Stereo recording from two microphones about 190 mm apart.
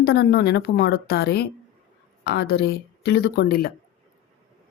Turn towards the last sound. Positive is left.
turn(degrees=50)  # may be behind; listen again after turning